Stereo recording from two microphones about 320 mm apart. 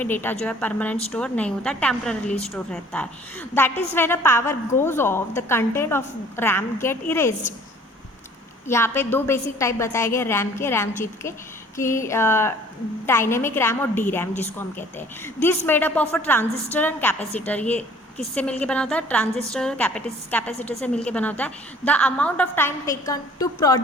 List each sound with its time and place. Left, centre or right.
0.0 s a woman's voice: centre
8.6 s a woman's voice: centre